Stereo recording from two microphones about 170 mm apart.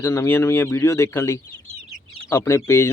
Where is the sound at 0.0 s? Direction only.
15° left (ahead or behind).